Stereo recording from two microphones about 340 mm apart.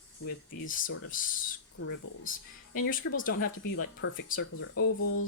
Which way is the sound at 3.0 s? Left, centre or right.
Left.